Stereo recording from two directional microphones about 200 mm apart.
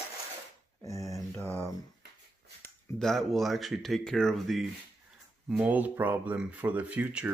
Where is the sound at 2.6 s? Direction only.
Centre (ahead or behind).